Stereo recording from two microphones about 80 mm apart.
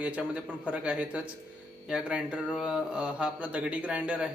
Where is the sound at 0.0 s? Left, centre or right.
Centre.